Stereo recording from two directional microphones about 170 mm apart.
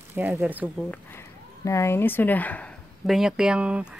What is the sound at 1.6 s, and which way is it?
Speech, 15° left (ahead or behind).